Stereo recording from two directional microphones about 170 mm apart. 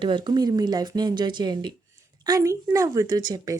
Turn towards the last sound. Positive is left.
turn(degrees=-25)  # may be behind; listen again after turning